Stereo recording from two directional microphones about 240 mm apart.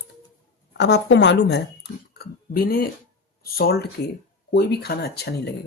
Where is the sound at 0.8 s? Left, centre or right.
Left.